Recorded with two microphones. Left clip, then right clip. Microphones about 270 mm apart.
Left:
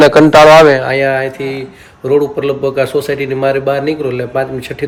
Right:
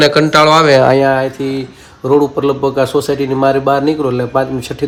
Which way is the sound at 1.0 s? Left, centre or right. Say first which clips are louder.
Right 1 dB; centre.